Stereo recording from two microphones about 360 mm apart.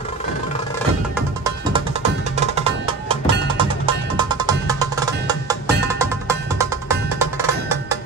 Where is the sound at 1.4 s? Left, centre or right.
Centre.